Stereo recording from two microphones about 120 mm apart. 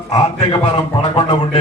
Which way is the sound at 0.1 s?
45° left (ahead or behind).